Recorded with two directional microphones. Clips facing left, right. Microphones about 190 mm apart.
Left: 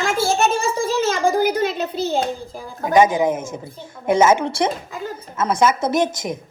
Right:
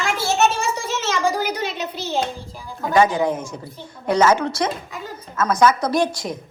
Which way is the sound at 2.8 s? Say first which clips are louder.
Left 2 dB; 20° left (ahead or behind).